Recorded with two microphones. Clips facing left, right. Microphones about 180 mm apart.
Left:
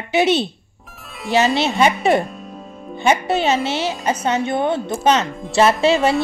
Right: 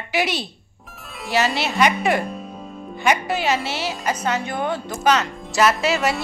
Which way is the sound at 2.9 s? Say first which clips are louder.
Left 4 dB; 25° left (ahead or behind).